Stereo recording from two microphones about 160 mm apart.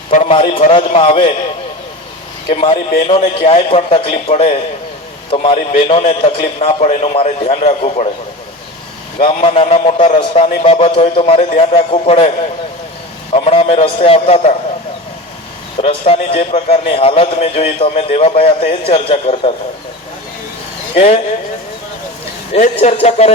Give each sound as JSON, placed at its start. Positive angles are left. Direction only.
{"t": 0.3, "sound": "a man's voice", "side_deg": 35}
{"t": 2.5, "sound": "a man's voice", "side_deg": 35}
{"t": 9.1, "sound": "a man's voice", "side_deg": 40}
{"t": 13.3, "sound": "a man's voice", "side_deg": 40}
{"t": 15.8, "sound": "a man's voice", "side_deg": 35}
{"t": 20.9, "sound": "speech", "side_deg": 40}
{"t": 22.5, "sound": "speech", "side_deg": 40}